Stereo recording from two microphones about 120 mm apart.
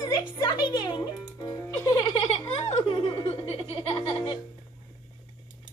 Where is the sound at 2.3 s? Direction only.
55° left (ahead or behind).